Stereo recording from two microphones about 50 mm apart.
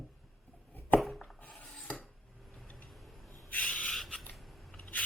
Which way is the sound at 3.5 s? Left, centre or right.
Left.